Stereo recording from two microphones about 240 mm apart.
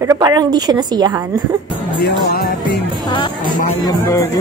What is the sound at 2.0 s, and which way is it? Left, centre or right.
Music, left.